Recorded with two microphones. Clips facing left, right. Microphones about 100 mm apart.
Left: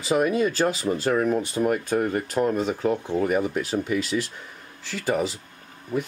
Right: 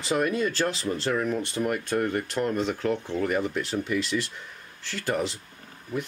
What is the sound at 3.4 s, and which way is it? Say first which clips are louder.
Speech: left 3 dB; 5° left (ahead or behind).